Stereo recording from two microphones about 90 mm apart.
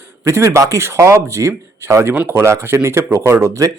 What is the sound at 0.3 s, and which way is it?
Speech, 35° right (ahead or behind).